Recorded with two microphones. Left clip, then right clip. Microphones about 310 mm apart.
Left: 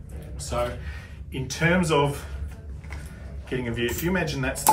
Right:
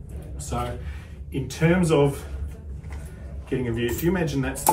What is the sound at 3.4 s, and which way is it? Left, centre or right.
A man's voice, centre.